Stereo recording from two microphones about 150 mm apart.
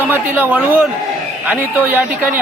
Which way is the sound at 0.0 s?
10° right (ahead or behind).